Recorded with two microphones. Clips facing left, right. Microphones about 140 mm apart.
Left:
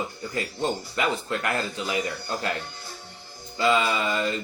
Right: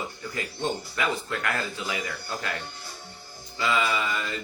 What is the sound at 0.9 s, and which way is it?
Speech, 25° left (ahead or behind).